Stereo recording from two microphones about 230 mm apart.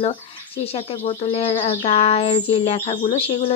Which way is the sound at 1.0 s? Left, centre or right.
Left.